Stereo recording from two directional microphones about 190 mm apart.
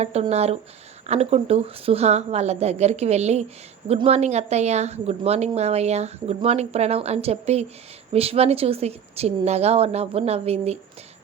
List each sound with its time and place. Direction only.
0.0 s speech: 35° right (ahead or behind)